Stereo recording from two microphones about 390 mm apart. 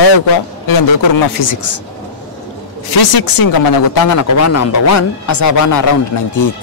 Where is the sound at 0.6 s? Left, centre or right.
Left.